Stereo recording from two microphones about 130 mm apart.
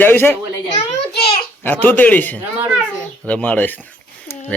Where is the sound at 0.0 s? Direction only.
15° left (ahead or behind).